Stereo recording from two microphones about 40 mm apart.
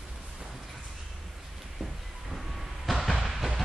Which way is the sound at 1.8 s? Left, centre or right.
Centre.